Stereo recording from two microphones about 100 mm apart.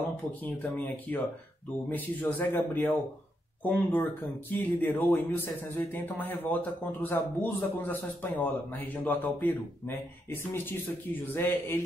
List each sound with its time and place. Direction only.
0.4 s a man's voice: 20° left (ahead or behind)